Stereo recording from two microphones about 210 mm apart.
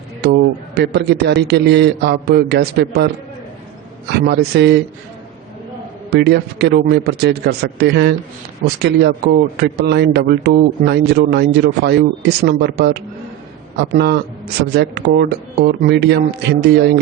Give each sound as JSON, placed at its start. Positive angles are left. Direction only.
{"t": 0.2, "sound": "a man's voice", "side_deg": -50}
{"t": 4.3, "sound": "a man's voice", "side_deg": -50}
{"t": 6.1, "sound": "a man's voice", "side_deg": -50}